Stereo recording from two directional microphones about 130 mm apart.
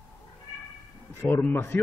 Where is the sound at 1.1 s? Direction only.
20° left (ahead or behind).